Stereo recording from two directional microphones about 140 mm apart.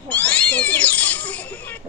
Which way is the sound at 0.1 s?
10° left (ahead or behind).